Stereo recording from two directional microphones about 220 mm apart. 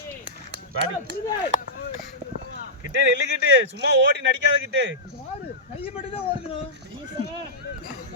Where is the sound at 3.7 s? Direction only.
50° right (ahead or behind).